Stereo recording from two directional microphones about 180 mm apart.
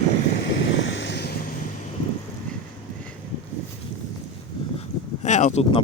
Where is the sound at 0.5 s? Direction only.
90° left; by 1.3 s 70° left (ahead or behind).